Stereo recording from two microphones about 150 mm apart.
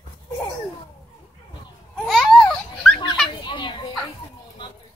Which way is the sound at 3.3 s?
30° left (ahead or behind).